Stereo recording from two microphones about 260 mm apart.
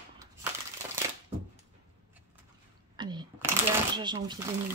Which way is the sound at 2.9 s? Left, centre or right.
Centre.